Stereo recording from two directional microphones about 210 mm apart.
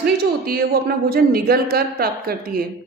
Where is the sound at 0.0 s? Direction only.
45° right (ahead or behind).